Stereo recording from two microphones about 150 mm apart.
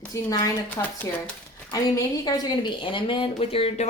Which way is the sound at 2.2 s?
30° left (ahead or behind).